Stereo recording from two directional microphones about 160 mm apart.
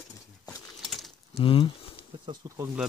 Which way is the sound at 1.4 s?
35° left (ahead or behind).